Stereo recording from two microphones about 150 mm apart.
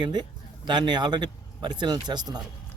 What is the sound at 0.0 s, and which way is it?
Speech, 30° right (ahead or behind).